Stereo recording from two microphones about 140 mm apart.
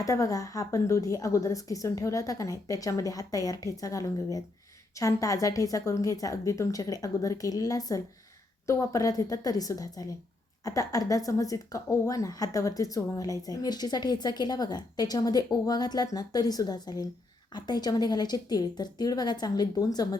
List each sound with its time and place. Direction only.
0.0 s a woman's voice: 25° left (ahead or behind)